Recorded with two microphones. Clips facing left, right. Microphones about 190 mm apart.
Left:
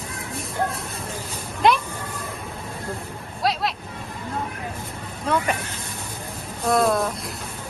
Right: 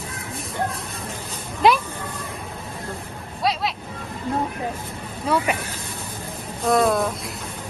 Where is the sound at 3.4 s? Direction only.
Centre (ahead or behind).